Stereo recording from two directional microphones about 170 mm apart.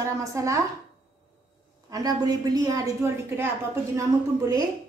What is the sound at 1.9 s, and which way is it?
A woman's voice, 20° right (ahead or behind).